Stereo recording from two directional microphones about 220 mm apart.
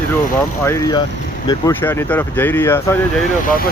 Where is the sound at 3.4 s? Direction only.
40° left (ahead or behind).